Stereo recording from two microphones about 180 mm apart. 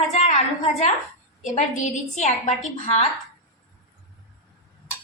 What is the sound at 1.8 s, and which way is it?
Speech, 40° left (ahead or behind).